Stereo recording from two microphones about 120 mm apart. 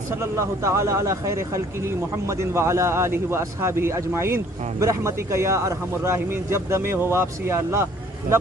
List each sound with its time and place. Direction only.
0.2 s a man's voice: 25° right (ahead or behind)